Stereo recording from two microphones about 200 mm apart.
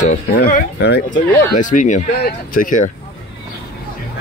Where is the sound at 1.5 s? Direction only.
40° left (ahead or behind).